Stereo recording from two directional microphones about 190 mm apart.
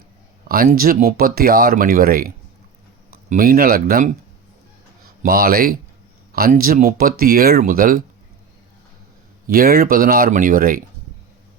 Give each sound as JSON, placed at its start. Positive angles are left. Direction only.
{"t": 0.4, "sound": "speech", "side_deg": -50}
{"t": 5.2, "sound": "speech", "side_deg": -50}
{"t": 9.5, "sound": "speech", "side_deg": -50}